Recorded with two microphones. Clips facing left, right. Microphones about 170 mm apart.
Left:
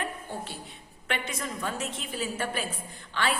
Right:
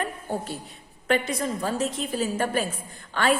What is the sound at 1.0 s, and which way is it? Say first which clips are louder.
A woman's voice: right 9 dB; 40° right (ahead or behind).